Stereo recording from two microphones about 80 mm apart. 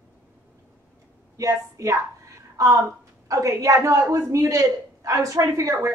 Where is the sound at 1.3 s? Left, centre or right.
Right.